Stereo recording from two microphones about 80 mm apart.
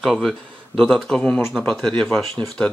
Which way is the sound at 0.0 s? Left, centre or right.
Centre.